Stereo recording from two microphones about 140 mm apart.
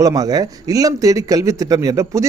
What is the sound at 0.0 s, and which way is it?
Speech, 25° right (ahead or behind).